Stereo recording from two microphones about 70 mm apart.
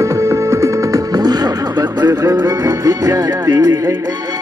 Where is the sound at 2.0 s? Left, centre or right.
Right.